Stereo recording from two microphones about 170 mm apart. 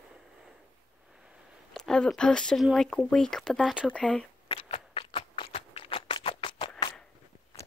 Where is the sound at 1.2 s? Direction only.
Centre (ahead or behind).